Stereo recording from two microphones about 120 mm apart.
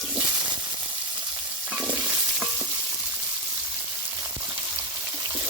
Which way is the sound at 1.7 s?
5° right (ahead or behind).